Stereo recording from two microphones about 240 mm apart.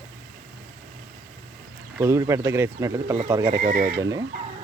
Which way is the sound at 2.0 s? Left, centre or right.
Centre.